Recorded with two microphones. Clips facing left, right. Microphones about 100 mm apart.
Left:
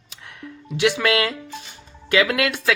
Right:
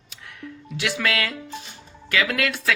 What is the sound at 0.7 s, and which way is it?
Speech, 20° left (ahead or behind).